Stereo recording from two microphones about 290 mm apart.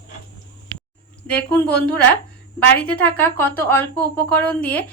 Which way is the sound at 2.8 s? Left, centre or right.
Centre.